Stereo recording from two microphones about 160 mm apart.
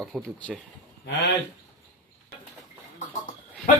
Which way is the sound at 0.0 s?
5° left (ahead or behind).